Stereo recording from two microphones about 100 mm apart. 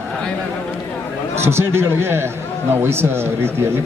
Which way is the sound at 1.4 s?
25° right (ahead or behind).